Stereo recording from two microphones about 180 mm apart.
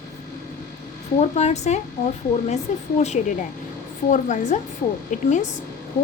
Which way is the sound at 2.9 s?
40° left (ahead or behind).